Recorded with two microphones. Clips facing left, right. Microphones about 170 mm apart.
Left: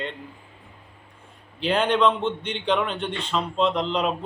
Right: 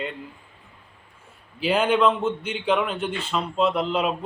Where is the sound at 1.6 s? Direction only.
5° right (ahead or behind).